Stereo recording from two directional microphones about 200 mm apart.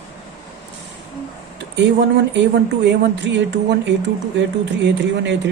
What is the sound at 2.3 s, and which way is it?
Speech, 65° right (ahead or behind).